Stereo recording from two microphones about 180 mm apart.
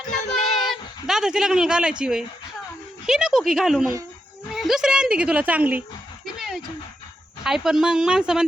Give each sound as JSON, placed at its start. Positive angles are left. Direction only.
{"t": 0.6, "sound": "speech", "side_deg": 0}
{"t": 6.2, "sound": "a sound", "side_deg": 0}
{"t": 7.4, "sound": "speech", "side_deg": 0}